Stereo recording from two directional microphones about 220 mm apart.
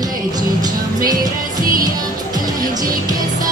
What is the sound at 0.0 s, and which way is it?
Music, 15° right (ahead or behind).